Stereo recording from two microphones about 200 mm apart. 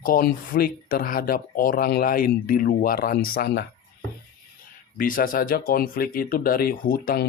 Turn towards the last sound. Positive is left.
turn(degrees=50)  # may be behind; listen again after turning